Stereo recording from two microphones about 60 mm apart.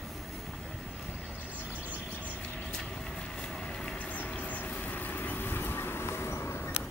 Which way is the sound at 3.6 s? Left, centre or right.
Centre.